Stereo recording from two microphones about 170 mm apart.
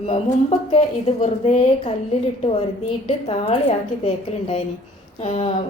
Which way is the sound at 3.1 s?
35° left (ahead or behind).